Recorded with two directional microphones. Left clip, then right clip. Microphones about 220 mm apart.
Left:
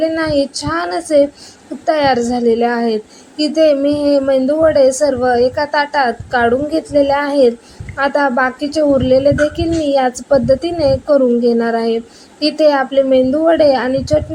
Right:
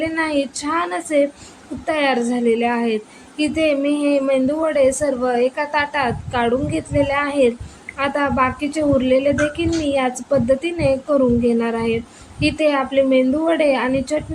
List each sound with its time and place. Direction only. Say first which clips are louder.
0.0 s a child's voice: left 5 dB; 15° left (ahead or behind)